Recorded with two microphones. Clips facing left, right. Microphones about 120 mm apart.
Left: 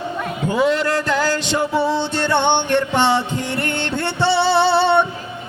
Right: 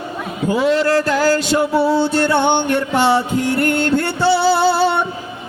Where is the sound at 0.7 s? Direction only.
35° right (ahead or behind).